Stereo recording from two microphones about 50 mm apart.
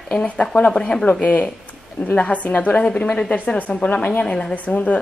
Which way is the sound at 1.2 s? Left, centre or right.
Left.